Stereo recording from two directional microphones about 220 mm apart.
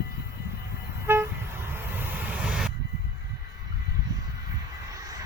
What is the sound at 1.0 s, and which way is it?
Vehicle, 10° right (ahead or behind).